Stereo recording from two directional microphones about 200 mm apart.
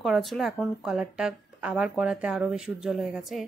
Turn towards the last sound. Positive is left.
turn(degrees=0)  # may be behind; listen again after turning